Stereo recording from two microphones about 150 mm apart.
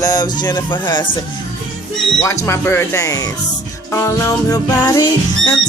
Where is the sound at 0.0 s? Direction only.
25° left (ahead or behind).